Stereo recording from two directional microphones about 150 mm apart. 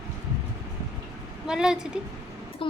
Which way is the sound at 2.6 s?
35° left (ahead or behind).